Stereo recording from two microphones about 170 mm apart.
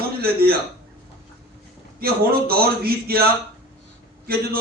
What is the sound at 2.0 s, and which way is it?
Speech, 65° right (ahead or behind).